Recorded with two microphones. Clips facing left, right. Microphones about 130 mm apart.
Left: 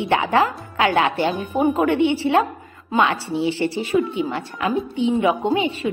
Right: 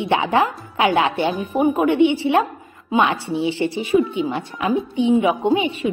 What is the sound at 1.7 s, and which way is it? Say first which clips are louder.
A woman's voice: right 2 dB; 20° right (ahead or behind).